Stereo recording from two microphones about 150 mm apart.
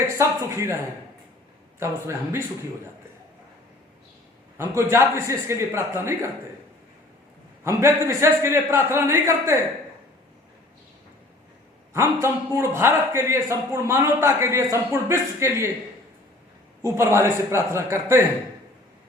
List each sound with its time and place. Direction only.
0.1 s a man's voice: 20° right (ahead or behind)
1.8 s a man's voice: 15° right (ahead or behind)
4.5 s a man's voice: 15° right (ahead or behind)
7.6 s a man's voice: 15° right (ahead or behind)
11.9 s a man's voice: 15° right (ahead or behind)
16.8 s a man's voice: 20° right (ahead or behind)